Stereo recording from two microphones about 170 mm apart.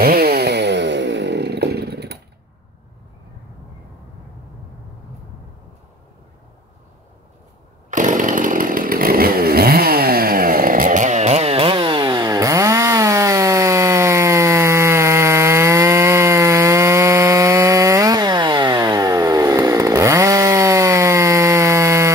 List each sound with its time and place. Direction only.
0.0 s chainsaw: 65° right (ahead or behind)
7.9 s chainsaw: 50° right (ahead or behind); by 22.1 s 15° right (ahead or behind)